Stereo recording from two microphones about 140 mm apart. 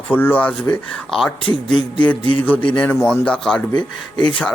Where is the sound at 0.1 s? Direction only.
15° left (ahead or behind).